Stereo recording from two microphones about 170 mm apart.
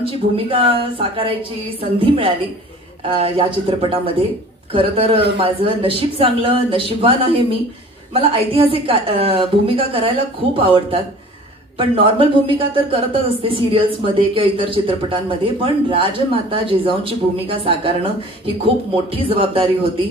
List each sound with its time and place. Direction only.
0.0 s speech: 30° right (ahead or behind)